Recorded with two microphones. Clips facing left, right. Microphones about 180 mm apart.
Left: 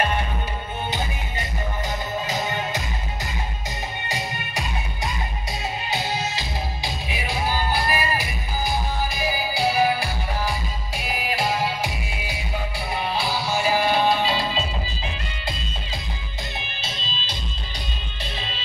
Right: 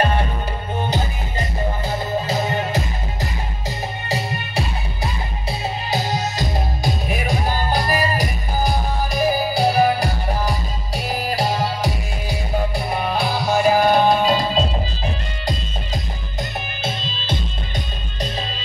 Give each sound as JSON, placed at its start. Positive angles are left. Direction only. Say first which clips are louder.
{"t": 0.0, "sound": "music", "louder": "right 4 dB", "side_deg": -35}
{"t": 12.7, "sound": "music", "louder": "right 5 dB", "side_deg": -50}